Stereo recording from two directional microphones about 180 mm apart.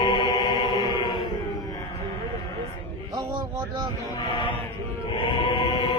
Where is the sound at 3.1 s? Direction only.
20° right (ahead or behind).